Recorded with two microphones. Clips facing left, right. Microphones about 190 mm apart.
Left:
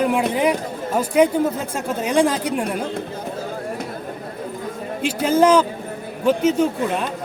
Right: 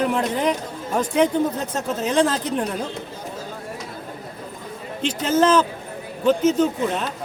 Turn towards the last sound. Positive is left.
turn(degrees=10)  # may be behind; listen again after turning